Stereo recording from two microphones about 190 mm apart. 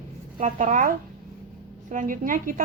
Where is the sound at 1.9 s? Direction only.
45° right (ahead or behind).